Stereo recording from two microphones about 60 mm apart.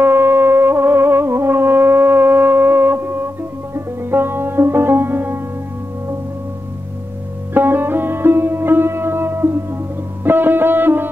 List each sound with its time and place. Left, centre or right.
0.0 s music: right
7.5 s music: right